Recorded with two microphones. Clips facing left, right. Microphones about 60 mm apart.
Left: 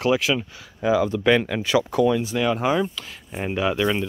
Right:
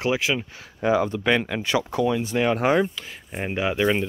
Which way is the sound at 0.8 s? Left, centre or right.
Right.